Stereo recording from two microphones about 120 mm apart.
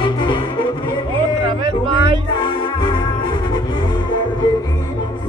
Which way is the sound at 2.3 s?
40° left (ahead or behind).